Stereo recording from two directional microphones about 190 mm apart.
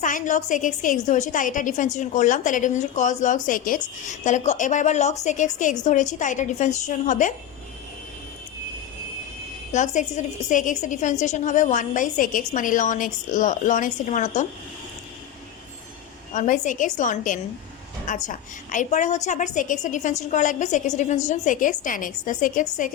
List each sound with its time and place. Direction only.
0.0 s a woman's voice: 40° left (ahead or behind)
9.7 s a woman's voice: 40° left (ahead or behind)
16.3 s a woman's voice: 40° left (ahead or behind)